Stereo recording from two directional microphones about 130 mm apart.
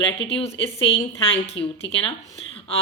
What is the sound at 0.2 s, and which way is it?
Speech, 50° left (ahead or behind).